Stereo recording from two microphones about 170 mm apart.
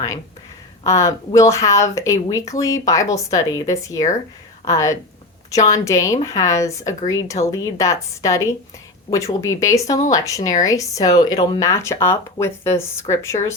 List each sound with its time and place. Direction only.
0.9 s speech: 20° left (ahead or behind)